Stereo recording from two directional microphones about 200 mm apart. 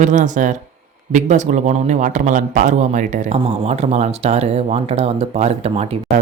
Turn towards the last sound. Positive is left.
turn(degrees=-30)  # may be behind; listen again after turning